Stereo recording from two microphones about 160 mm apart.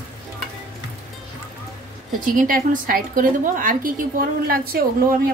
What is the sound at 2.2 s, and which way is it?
A woman's voice, 60° right (ahead or behind).